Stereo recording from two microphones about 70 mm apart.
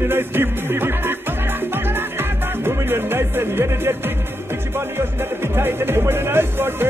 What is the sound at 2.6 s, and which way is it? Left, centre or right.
Speech, right.